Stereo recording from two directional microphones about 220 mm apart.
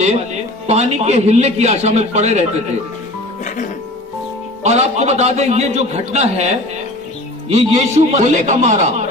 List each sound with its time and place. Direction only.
0.7 s a man's voice: 30° right (ahead or behind)
4.6 s a man's voice: 30° right (ahead or behind)